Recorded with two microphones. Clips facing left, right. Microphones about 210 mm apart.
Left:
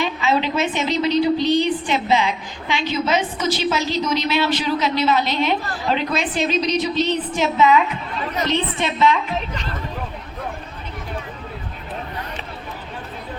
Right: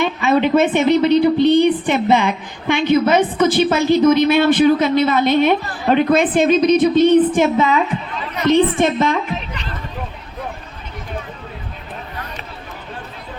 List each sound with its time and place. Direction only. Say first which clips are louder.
0.0 s a woman's voice: right 5 dB; 55° right (ahead or behind)